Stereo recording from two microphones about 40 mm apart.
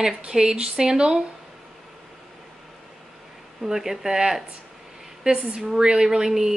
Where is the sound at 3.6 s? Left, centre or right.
Centre.